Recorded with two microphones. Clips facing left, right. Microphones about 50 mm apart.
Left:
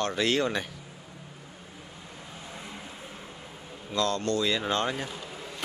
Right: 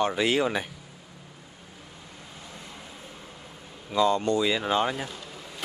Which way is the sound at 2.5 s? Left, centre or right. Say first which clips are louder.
Left 3 dB; centre.